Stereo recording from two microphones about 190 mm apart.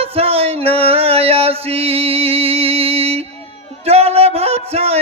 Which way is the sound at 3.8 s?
30° right (ahead or behind).